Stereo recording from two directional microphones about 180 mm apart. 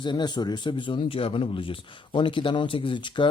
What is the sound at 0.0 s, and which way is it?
Speech, 25° left (ahead or behind).